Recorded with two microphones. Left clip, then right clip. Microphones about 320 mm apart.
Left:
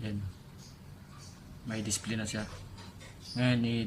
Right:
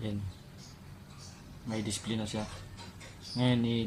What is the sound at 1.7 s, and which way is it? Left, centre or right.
Speech, left.